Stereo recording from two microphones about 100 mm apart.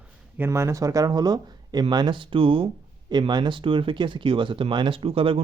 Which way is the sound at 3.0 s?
45° right (ahead or behind).